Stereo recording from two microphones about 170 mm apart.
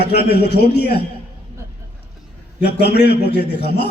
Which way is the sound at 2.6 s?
80° left.